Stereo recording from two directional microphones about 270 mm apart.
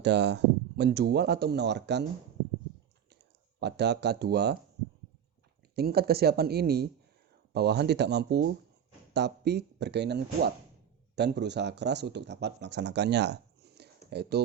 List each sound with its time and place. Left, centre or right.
0.0 s speech: right
3.6 s speech: right
5.7 s speech: right